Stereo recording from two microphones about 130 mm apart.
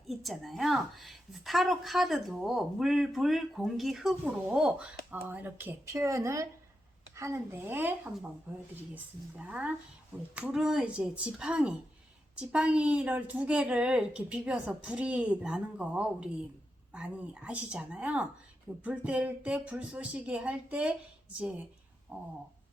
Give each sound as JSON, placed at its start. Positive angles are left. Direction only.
{"t": 0.1, "sound": "a woman's voice", "side_deg": 0}
{"t": 9.4, "sound": "a woman's voice", "side_deg": -10}
{"t": 22.1, "sound": "a woman's voice", "side_deg": -15}